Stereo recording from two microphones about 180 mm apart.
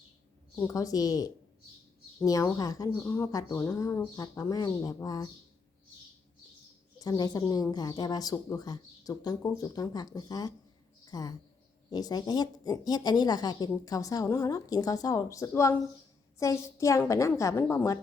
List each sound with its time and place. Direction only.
0.7 s speech: 20° left (ahead or behind)
7.0 s speech: 20° left (ahead or behind)